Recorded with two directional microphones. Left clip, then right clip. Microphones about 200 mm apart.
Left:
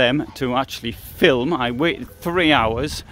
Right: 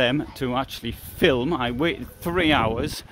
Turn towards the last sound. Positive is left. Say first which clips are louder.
# left 4 dB
turn(degrees=20)  # may be behind; listen again after turning